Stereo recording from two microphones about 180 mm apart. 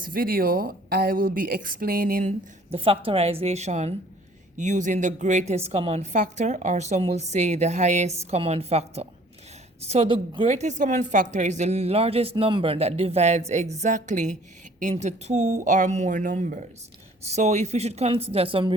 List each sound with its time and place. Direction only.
0.0 s speech: 55° right (ahead or behind)
2.7 s a woman's voice: 30° right (ahead or behind)